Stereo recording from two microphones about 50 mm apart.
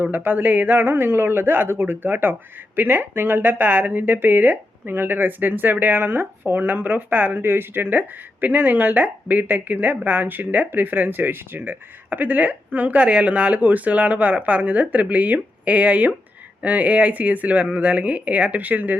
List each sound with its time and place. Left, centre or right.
0.0 s speech: right
0.8 s speech: right